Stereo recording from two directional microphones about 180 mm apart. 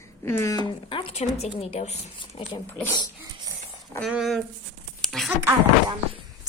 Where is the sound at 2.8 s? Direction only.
20° left (ahead or behind).